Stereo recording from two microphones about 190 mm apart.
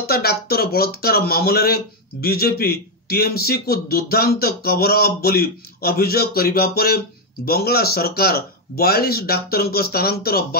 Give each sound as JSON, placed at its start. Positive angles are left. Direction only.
{"t": 0.0, "sound": "a man's voice", "side_deg": 55}